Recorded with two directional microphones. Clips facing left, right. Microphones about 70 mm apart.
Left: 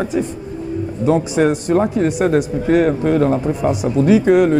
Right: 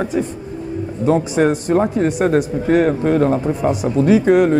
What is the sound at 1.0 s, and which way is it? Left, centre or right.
Speech, right.